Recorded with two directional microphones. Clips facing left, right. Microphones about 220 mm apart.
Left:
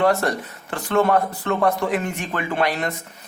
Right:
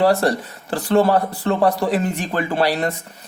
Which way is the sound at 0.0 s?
35° right (ahead or behind).